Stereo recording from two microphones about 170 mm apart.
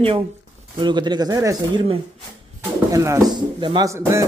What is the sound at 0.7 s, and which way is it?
Speech, 25° right (ahead or behind).